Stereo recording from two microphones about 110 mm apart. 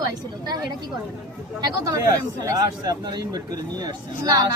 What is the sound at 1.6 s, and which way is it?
Speech, 35° right (ahead or behind).